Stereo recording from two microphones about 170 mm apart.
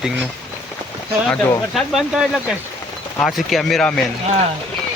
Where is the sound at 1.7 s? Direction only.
Centre (ahead or behind).